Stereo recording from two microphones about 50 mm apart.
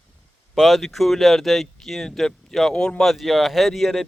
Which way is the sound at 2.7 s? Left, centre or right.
Centre.